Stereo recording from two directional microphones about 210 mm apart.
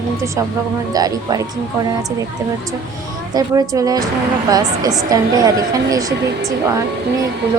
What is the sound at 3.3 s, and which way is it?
A woman's voice, 20° right (ahead or behind).